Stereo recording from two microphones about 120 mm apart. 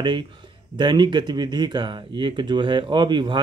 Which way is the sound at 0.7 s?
40° right (ahead or behind).